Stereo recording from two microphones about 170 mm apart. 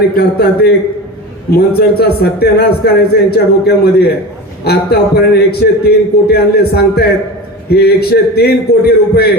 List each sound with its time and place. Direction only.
0.2 s a man's voice: 65° left (ahead or behind)